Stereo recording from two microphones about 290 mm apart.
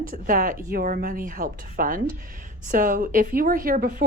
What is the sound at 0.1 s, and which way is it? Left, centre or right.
A woman's voice, right.